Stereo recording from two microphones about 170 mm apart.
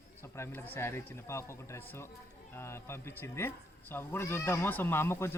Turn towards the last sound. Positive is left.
turn(degrees=15)  # may be behind; listen again after turning